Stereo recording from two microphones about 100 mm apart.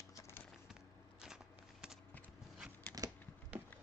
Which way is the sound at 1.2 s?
5° right (ahead or behind).